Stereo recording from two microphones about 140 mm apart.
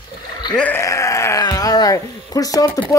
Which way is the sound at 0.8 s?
20° left (ahead or behind).